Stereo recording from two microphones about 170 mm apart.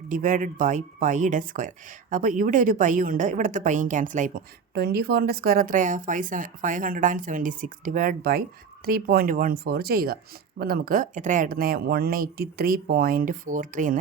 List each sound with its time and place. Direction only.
0.1 s speech: 50° right (ahead or behind)
4.7 s speech: 65° right (ahead or behind); by 14.0 s 50° right (ahead or behind)